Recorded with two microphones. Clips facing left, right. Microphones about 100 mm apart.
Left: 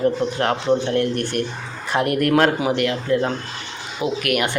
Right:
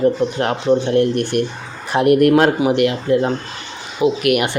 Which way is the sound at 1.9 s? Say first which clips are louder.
Right 6 dB; 15° right (ahead or behind).